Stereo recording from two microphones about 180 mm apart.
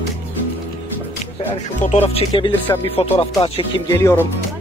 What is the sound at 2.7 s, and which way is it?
A man's voice, 20° left (ahead or behind).